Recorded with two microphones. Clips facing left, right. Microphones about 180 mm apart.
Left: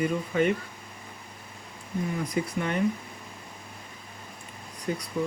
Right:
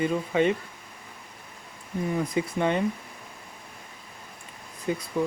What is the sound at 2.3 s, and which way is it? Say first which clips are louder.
Speech: right 3 dB; 25° right (ahead or behind).